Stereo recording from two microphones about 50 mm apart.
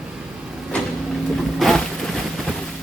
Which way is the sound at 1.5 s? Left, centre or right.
Centre.